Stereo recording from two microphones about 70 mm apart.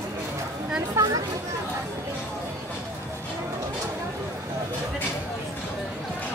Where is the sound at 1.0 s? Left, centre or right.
Right.